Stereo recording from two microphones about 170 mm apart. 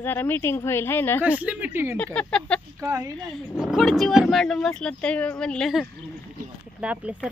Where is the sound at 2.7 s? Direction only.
15° right (ahead or behind).